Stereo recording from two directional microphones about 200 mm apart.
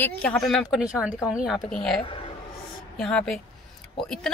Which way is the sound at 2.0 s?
25° left (ahead or behind).